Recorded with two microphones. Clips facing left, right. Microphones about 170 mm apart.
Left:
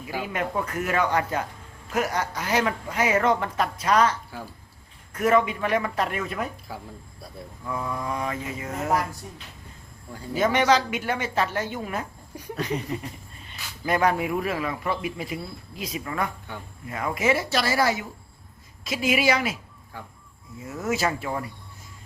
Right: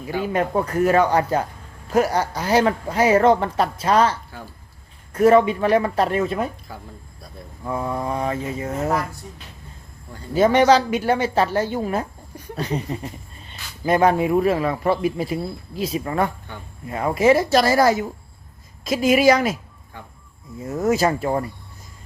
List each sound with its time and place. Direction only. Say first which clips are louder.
0.2 s speech: right 7 dB; 35° right (ahead or behind)
6.7 s speech: even; 5° left (ahead or behind)
7.6 s speech: right 5 dB; 30° right (ahead or behind)
10.3 s speech: right 6 dB; 30° right (ahead or behind)
20.6 s speech: right 7 dB; 40° right (ahead or behind)